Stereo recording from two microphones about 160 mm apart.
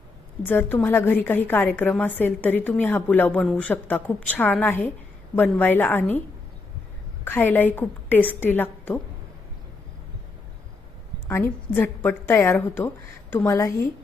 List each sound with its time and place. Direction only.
0.4 s a woman's voice: 10° left (ahead or behind)
7.3 s a woman's voice: 10° left (ahead or behind)
11.3 s a woman's voice: 15° left (ahead or behind)